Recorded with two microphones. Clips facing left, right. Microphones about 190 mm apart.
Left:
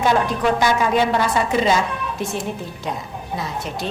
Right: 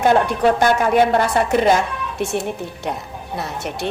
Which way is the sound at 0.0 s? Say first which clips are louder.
Right 3 dB; 55° right (ahead or behind).